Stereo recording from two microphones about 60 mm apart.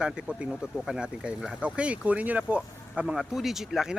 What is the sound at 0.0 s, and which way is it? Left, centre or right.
Speech, centre.